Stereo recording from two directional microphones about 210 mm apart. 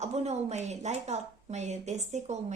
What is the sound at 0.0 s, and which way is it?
A woman's voice, 30° right (ahead or behind).